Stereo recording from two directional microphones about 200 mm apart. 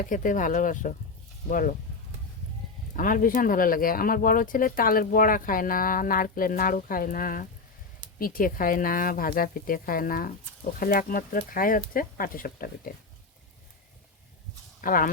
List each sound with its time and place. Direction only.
0.1 s speech: 40° left (ahead or behind)
2.9 s speech: 40° left (ahead or behind)
14.8 s speech: 45° left (ahead or behind)